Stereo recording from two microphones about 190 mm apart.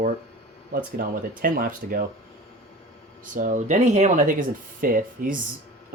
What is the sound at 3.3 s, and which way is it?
Speech, 45° right (ahead or behind).